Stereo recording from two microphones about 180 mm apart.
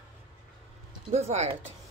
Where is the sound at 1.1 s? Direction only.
40° right (ahead or behind).